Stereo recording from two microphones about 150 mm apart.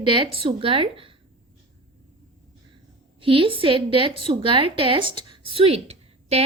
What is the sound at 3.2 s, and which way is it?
A woman's voice, 35° right (ahead or behind).